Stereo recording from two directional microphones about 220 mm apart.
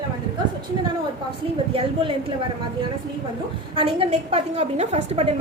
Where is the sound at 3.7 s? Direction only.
25° right (ahead or behind).